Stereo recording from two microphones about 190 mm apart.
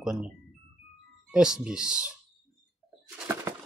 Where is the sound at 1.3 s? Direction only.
5° right (ahead or behind).